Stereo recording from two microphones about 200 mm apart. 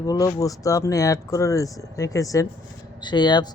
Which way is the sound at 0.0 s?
15° left (ahead or behind).